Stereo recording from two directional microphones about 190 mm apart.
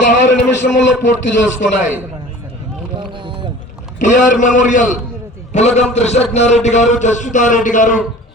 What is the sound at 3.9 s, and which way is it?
A man's voice, 40° left (ahead or behind).